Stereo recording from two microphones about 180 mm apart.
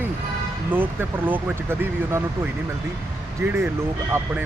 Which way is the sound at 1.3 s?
10° right (ahead or behind).